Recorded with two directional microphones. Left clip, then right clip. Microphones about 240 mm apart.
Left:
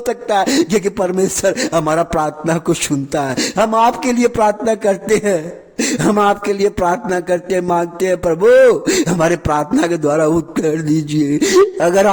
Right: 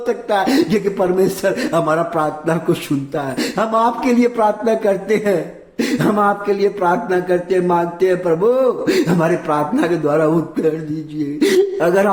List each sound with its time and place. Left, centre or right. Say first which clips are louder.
0.1 s a man's voice: left 1 dB; left